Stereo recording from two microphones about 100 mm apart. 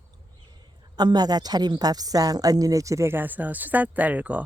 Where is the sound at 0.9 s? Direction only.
40° right (ahead or behind).